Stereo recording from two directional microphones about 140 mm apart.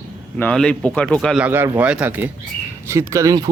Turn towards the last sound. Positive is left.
turn(degrees=-25)  # may be behind; listen again after turning